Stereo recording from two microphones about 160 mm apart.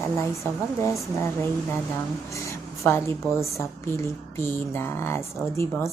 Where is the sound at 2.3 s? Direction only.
20° left (ahead or behind).